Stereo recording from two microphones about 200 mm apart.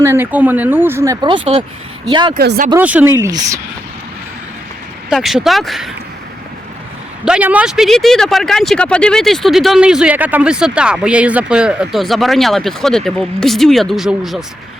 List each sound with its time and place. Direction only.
0.0 s speech: 10° right (ahead or behind)
2.3 s speech: 50° right (ahead or behind)
2.7 s speech: 10° right (ahead or behind)
5.0 s speech: centre (ahead or behind)
7.3 s speech: 5° right (ahead or behind)